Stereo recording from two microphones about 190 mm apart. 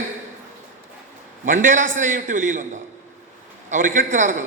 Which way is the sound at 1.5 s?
40° right (ahead or behind).